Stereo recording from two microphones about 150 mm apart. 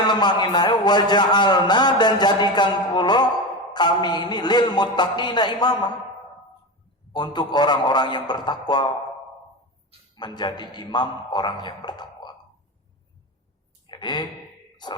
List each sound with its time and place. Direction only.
0.0 s a man's voice: 30° left (ahead or behind)
7.1 s a man's voice: 30° left (ahead or behind)
10.2 s a man's voice: 30° left (ahead or behind)
13.8 s a sound: 30° left (ahead or behind)